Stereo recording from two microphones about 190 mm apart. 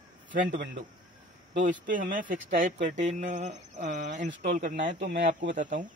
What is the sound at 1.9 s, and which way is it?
Speech, 45° right (ahead or behind).